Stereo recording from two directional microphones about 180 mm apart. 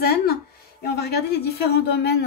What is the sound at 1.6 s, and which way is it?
Speech, 60° left (ahead or behind).